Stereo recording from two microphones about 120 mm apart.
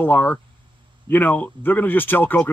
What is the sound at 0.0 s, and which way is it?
Speech, 15° left (ahead or behind).